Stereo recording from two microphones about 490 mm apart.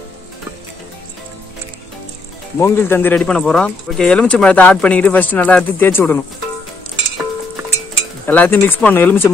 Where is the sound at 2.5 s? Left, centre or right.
Centre.